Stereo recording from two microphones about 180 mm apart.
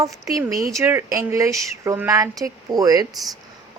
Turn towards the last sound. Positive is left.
turn(degrees=0)  # may be behind; listen again after turning